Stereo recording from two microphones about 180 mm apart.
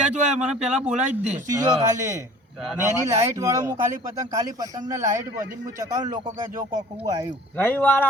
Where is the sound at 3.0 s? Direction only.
15° right (ahead or behind).